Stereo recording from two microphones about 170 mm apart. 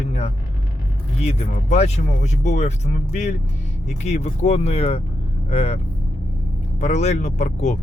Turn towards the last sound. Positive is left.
turn(degrees=45)  # may be behind; listen again after turning